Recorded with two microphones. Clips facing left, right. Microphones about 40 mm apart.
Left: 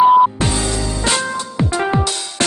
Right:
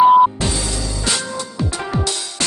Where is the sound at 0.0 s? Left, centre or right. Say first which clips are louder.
Even; centre.